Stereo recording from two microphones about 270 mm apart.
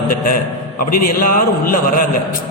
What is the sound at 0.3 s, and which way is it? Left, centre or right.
Speech, left.